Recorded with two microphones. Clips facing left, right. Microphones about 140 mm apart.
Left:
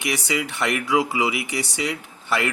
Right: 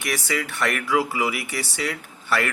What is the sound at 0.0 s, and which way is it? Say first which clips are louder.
A man's voice: left 2 dB; 15° left (ahead or behind).